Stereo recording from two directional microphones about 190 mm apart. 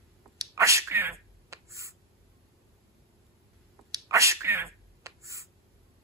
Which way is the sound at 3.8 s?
20° right (ahead or behind).